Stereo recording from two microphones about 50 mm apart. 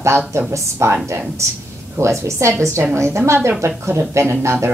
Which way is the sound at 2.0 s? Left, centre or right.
Right.